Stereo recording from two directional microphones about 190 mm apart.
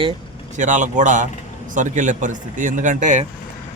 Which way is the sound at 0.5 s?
40° right (ahead or behind).